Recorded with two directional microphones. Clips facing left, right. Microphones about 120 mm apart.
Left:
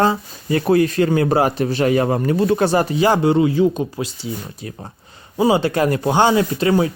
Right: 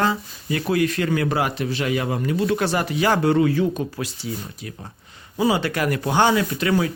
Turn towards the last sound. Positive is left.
turn(degrees=25)  # may be behind; listen again after turning